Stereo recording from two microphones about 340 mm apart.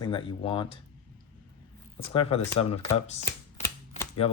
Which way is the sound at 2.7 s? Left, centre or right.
Centre.